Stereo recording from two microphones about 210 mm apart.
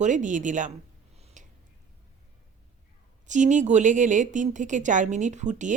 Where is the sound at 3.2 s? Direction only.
35° right (ahead or behind).